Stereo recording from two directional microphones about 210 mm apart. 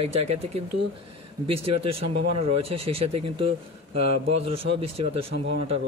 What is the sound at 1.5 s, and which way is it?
Speech, 25° right (ahead or behind).